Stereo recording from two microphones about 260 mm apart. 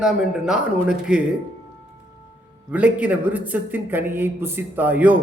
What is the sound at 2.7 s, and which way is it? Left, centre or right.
A man's voice, centre.